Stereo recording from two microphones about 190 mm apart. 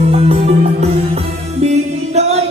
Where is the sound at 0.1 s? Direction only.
30° right (ahead or behind).